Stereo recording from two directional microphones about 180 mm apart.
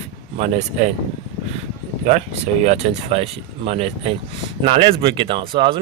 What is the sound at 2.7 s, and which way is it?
Speech, 35° right (ahead or behind).